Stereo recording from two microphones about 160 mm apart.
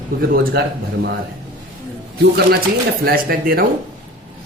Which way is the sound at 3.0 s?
70° right (ahead or behind).